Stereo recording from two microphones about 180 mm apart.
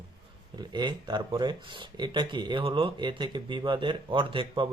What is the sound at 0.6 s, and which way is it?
Speech, 25° right (ahead or behind).